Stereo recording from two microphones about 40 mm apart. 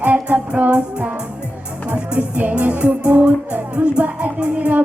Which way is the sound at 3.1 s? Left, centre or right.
Right.